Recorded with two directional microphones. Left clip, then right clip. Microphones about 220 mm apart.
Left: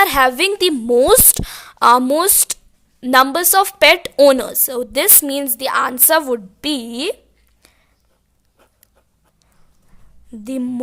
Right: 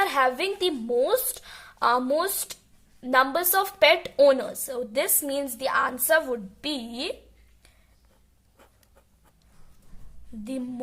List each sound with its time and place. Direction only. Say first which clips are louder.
0.0 s a woman's voice: left 10 dB; 40° left (ahead or behind)
10.4 s a woman's voice: left 10 dB; 40° left (ahead or behind)